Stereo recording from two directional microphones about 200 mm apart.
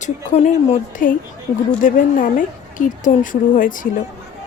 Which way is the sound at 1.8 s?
40° left (ahead or behind).